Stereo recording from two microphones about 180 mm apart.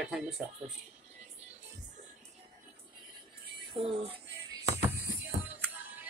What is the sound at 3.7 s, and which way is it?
Speech, 30° right (ahead or behind).